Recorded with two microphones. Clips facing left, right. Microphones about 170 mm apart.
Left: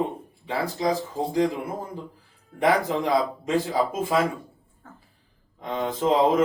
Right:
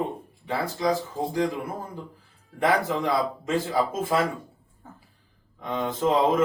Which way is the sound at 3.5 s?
15° left (ahead or behind).